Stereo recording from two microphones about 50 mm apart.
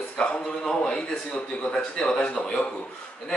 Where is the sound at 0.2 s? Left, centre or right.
Centre.